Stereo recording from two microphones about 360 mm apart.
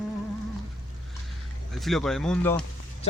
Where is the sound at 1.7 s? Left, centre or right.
Centre.